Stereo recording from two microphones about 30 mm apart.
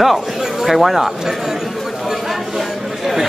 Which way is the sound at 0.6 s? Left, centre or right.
Centre.